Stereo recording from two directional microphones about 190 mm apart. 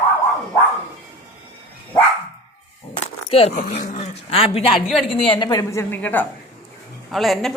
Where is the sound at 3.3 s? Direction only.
30° left (ahead or behind); by 7.5 s centre (ahead or behind).